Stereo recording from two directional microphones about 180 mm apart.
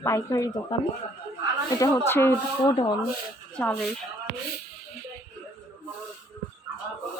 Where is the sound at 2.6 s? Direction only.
25° left (ahead or behind).